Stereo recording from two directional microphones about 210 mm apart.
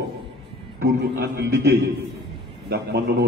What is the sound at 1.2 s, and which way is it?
A man's voice, 50° right (ahead or behind).